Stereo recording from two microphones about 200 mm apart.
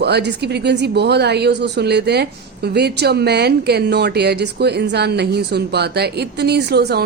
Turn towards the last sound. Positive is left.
turn(degrees=-55)  # may be behind; listen again after turning